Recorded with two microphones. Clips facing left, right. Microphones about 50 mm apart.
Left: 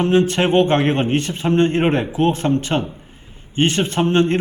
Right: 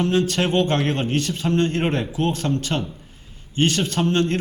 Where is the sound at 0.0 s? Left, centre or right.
Left.